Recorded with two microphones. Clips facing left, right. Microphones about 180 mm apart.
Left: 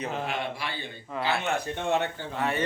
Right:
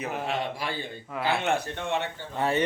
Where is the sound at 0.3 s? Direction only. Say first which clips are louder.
Right 2 dB; 40° right (ahead or behind).